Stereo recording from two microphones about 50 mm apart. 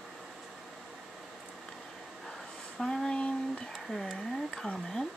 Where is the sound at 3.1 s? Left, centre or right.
Centre.